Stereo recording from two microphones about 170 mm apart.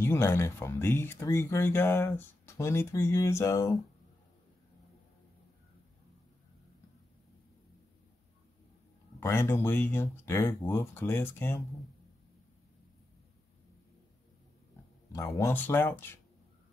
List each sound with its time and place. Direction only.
0.0 s speech: 15° left (ahead or behind)
9.2 s speech: 15° left (ahead or behind)
15.1 s speech: 15° left (ahead or behind)